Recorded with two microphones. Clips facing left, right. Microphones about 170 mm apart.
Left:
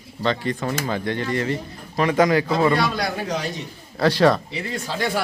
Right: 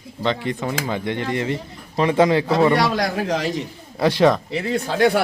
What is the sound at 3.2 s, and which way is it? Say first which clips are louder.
Speech: right 4 dB; 90° right.